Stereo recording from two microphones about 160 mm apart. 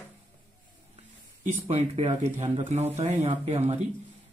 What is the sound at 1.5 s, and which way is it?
A man's voice, 45° right (ahead or behind).